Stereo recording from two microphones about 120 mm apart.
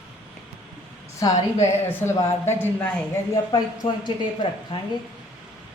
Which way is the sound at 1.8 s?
20° left (ahead or behind).